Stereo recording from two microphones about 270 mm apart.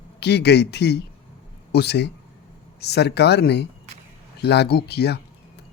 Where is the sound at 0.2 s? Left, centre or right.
Left.